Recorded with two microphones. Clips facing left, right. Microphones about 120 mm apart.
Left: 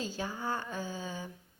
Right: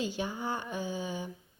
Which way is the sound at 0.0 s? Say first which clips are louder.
Right 3 dB; 20° right (ahead or behind).